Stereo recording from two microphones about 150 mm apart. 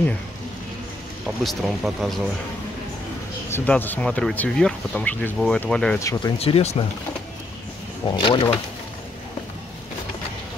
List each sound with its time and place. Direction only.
1.2 s speech: centre (ahead or behind)
3.4 s speech: 15° left (ahead or behind)
5.9 s speech: 25° left (ahead or behind)
6.3 s speech: 40° left (ahead or behind)
8.2 s speech: 35° left (ahead or behind)